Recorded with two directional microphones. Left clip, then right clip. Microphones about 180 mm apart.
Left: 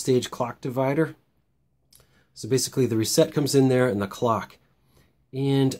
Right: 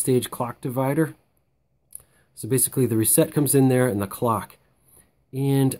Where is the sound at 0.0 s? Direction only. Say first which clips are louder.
Even; 30° right (ahead or behind).